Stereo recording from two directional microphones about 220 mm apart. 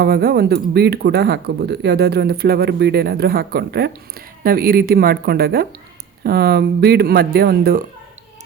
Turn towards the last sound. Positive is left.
turn(degrees=-45)  # may be behind; listen again after turning